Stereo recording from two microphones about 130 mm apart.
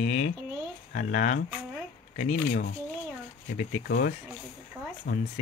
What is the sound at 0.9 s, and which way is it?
Speech, 85° left.